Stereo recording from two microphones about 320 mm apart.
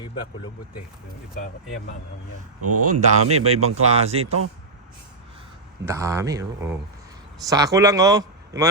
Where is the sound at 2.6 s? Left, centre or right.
Right.